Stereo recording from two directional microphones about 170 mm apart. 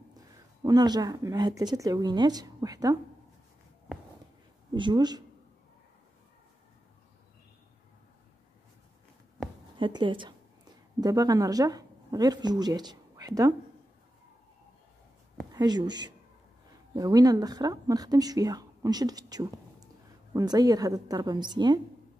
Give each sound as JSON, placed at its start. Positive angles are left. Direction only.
{"t": 0.7, "sound": "speech", "side_deg": -25}
{"t": 4.7, "sound": "speech", "side_deg": -25}
{"t": 9.8, "sound": "speech", "side_deg": -30}
{"t": 15.5, "sound": "speech", "side_deg": -25}